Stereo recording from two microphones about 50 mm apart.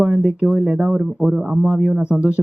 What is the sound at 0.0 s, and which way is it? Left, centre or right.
A man's voice, centre.